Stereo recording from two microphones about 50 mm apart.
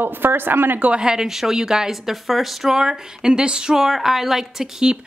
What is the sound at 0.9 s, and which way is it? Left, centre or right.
A woman's voice, centre.